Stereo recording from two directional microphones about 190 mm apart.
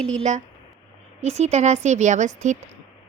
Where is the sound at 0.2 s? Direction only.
40° right (ahead or behind).